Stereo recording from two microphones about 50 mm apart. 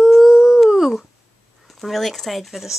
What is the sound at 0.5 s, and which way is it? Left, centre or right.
Dog, centre.